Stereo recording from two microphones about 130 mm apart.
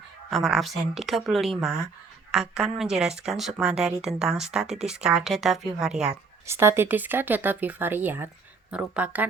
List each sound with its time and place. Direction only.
0.3 s speech: centre (ahead or behind)
6.4 s speech: 20° right (ahead or behind)